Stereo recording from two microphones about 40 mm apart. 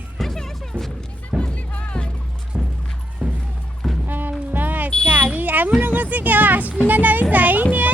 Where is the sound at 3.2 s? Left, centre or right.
Right.